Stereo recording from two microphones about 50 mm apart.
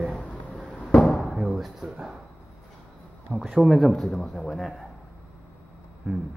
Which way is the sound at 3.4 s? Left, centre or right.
Centre.